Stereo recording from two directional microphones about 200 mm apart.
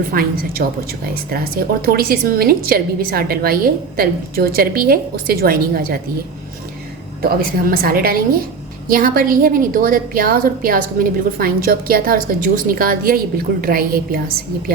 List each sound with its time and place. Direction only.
0.1 s a woman's voice: 50° right (ahead or behind)
7.2 s a woman's voice: 50° right (ahead or behind)